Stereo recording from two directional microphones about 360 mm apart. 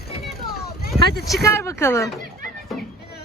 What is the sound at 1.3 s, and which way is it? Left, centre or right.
Speech, centre.